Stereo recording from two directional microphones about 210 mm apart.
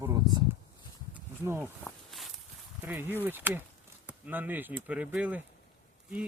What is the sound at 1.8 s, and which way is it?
Walk, centre (ahead or behind).